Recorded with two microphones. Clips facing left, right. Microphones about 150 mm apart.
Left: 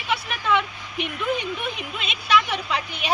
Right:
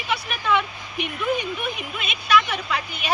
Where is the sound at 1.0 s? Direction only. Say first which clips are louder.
Right 1 dB; 10° right (ahead or behind).